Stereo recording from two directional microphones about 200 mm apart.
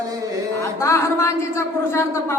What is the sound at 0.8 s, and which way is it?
Speech, 15° left (ahead or behind).